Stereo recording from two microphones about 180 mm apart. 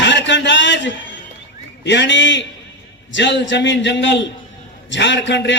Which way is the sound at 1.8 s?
80° left.